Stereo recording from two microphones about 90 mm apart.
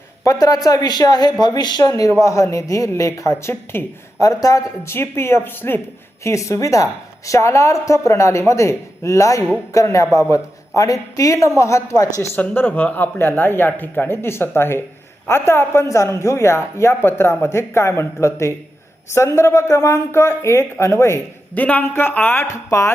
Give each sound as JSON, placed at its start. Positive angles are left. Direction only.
{"t": 0.3, "sound": "a woman's voice", "side_deg": 40}
{"t": 4.2, "sound": "a man's voice", "side_deg": 40}
{"t": 6.2, "sound": "a woman's voice", "side_deg": 35}
{"t": 12.4, "sound": "a man's voice", "side_deg": 20}
{"t": 21.5, "sound": "a man's voice", "side_deg": 20}
{"t": 22.5, "sound": "a woman's voice", "side_deg": 35}